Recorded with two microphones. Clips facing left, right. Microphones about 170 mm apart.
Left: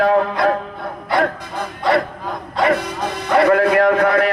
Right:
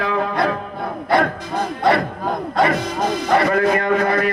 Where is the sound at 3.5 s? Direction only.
65° left (ahead or behind).